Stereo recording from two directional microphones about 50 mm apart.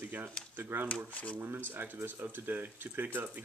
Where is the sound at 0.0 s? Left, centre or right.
Right.